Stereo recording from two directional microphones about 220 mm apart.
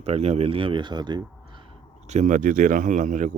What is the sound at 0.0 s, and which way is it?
Speech, 30° right (ahead or behind).